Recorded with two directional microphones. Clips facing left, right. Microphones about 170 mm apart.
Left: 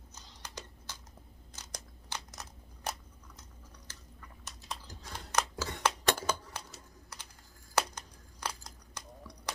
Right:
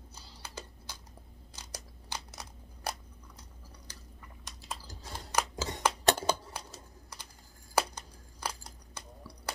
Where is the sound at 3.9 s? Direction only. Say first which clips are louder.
Right 1 dB; 10° right (ahead or behind).